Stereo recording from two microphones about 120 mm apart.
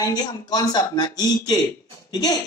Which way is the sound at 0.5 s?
35° left (ahead or behind).